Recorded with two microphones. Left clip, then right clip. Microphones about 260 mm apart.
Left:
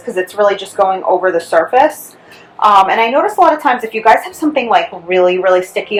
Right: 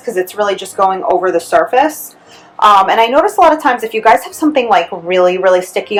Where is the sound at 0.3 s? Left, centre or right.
Centre.